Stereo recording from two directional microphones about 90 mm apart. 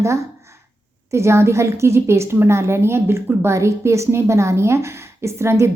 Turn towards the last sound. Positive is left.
turn(degrees=-30)  # may be behind; listen again after turning